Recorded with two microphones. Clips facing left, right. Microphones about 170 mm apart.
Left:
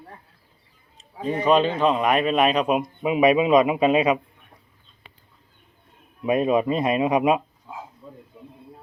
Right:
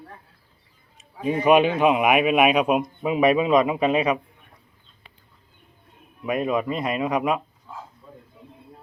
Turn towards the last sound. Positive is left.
turn(degrees=15)  # may be behind; listen again after turning